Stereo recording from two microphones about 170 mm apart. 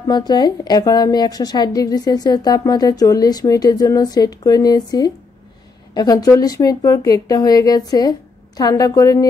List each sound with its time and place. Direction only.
0.0 s a woman's voice: 25° left (ahead or behind)